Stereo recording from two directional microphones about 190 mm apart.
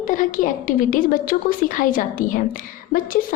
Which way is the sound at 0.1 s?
45° left (ahead or behind).